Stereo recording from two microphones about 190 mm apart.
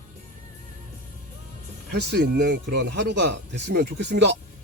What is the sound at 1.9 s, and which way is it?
A man's voice, 55° right (ahead or behind).